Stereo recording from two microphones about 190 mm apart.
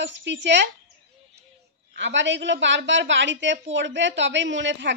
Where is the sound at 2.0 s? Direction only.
70° right (ahead or behind).